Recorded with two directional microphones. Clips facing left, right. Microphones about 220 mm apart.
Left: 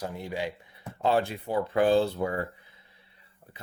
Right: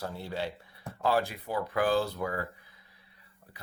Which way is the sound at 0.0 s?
15° left (ahead or behind).